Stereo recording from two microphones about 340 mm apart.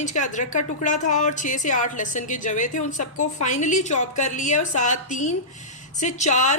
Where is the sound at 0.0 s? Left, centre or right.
Left.